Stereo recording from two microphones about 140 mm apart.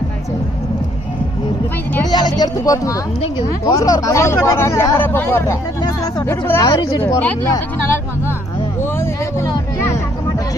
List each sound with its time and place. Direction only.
2.0 s speech: 30° left (ahead or behind); by 5.5 s 15° left (ahead or behind)
6.5 s speech: 25° left (ahead or behind)
7.2 s speech: 15° left (ahead or behind)
8.8 s speech: 15° left (ahead or behind)